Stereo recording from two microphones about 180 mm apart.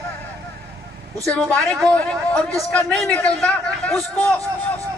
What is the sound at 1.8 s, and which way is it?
A man's voice, 5° left (ahead or behind).